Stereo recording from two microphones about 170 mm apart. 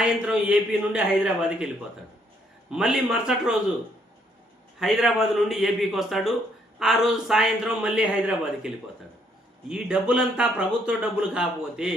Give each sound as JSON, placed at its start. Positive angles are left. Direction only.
{"t": 0.0, "sound": "speech", "side_deg": -5}
{"t": 4.8, "sound": "speech", "side_deg": 0}